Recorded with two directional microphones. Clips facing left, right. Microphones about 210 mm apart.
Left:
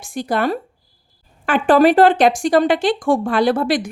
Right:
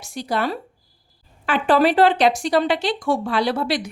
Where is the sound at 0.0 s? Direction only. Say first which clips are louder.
Left 4 dB; 50° left (ahead or behind).